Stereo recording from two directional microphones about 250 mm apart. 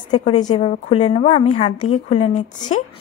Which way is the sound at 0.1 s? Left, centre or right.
Left.